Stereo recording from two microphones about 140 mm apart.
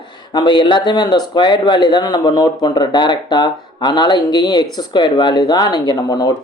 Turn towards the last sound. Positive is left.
turn(degrees=30)  # may be behind; listen again after turning